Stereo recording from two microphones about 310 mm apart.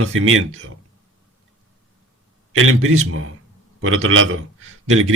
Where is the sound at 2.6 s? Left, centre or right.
Right.